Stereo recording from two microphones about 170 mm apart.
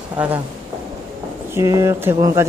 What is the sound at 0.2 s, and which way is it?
Speech, 5° right (ahead or behind).